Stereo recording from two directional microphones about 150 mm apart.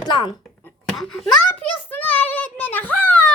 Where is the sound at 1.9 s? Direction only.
10° left (ahead or behind).